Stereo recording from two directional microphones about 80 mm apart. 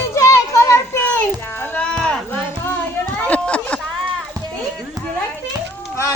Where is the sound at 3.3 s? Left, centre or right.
Centre.